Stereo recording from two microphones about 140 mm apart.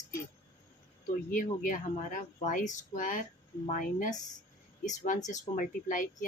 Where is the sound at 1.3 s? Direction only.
70° left (ahead or behind).